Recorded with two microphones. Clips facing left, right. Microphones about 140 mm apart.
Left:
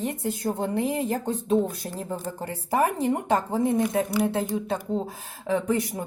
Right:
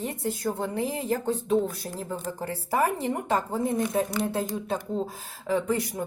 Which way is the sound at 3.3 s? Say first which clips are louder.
Left 2 dB; 25° left (ahead or behind).